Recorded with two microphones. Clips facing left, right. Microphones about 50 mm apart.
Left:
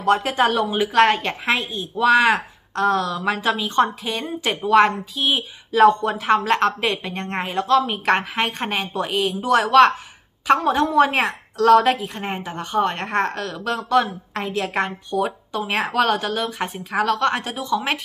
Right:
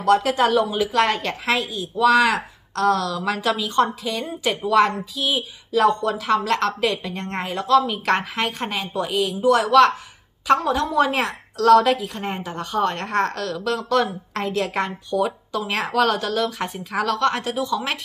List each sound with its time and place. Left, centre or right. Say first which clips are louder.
0.0 s a woman's voice: right 1 dB; left
14.3 s a woman's voice: left 2 dB; centre